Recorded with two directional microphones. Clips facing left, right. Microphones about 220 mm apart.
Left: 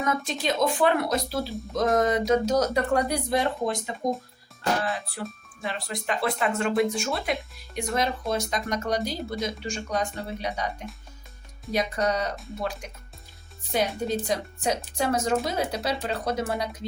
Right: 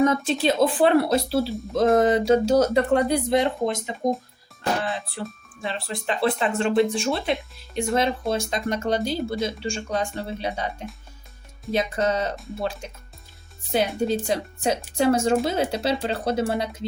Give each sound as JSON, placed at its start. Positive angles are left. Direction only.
{"t": 0.0, "sound": "speech", "side_deg": -30}
{"t": 4.8, "sound": "music", "side_deg": -25}
{"t": 5.6, "sound": "speech", "side_deg": -30}
{"t": 14.1, "sound": "speech", "side_deg": -30}